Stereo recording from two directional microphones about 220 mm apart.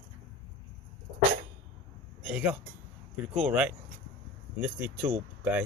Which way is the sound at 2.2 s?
5° right (ahead or behind).